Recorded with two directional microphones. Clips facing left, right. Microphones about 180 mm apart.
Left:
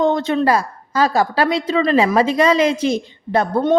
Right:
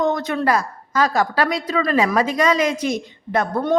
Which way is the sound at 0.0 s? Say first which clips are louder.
Left 4 dB; 30° left (ahead or behind).